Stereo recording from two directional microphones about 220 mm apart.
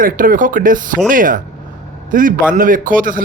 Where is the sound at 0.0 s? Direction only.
40° right (ahead or behind).